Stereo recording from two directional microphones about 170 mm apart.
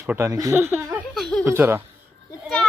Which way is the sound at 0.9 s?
Centre (ahead or behind).